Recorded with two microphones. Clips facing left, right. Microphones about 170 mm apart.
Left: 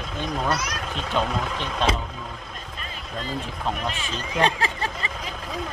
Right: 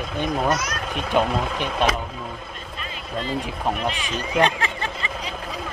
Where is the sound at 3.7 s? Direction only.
15° right (ahead or behind).